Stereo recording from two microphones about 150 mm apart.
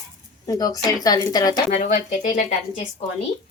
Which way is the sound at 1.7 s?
50° left (ahead or behind).